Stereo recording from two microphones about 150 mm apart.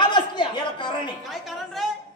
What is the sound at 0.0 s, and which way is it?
Chuckle, 30° left (ahead or behind).